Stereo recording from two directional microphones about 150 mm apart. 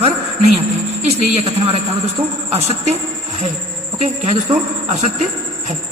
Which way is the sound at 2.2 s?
10° right (ahead or behind).